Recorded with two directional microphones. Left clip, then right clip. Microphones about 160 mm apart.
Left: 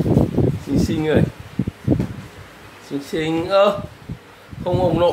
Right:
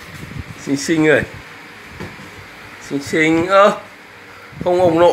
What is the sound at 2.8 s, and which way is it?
Speech, 15° right (ahead or behind).